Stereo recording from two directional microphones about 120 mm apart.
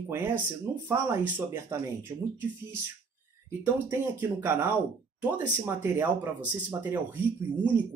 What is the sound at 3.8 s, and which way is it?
Speech, 20° right (ahead or behind).